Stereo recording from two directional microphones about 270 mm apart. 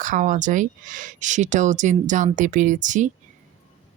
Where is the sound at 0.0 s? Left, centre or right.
Right.